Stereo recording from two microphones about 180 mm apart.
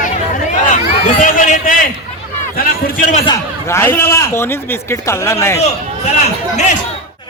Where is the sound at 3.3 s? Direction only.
15° left (ahead or behind).